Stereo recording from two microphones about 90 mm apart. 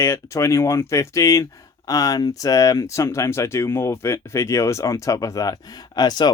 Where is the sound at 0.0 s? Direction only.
30° left (ahead or behind).